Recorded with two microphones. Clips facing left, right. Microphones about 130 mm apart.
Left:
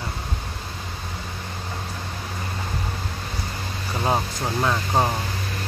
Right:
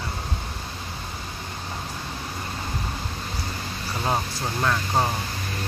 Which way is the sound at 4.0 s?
20° left (ahead or behind).